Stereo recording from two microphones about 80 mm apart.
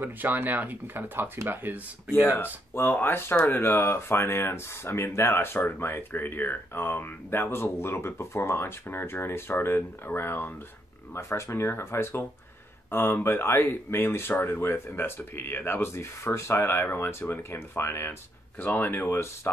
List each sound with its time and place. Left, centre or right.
0.0 s speech: right
2.2 s speech: left